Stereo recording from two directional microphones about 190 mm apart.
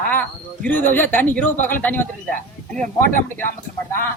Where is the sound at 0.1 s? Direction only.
10° left (ahead or behind).